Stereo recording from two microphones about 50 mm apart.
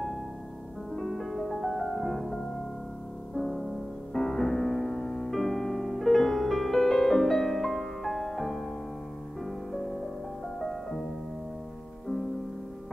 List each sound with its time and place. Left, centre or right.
0.9 s music: centre
4.1 s music: centre
5.3 s music: centre